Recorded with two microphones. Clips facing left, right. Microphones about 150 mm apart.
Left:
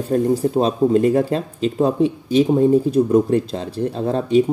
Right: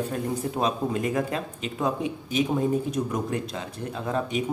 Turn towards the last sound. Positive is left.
turn(degrees=30)  # may be behind; listen again after turning